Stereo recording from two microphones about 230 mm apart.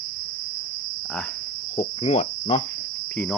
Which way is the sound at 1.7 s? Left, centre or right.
Left.